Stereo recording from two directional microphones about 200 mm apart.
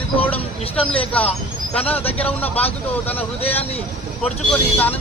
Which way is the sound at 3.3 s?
30° left (ahead or behind).